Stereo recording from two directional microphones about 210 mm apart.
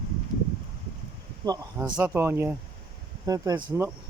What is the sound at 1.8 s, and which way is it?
Speech, 5° right (ahead or behind).